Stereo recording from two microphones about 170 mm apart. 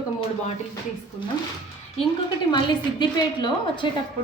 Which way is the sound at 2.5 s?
25° left (ahead or behind).